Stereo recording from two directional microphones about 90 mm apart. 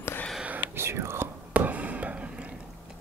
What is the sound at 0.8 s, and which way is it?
Whispering, 30° right (ahead or behind).